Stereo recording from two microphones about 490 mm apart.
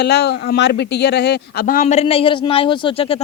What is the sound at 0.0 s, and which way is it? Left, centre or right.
Speech, centre.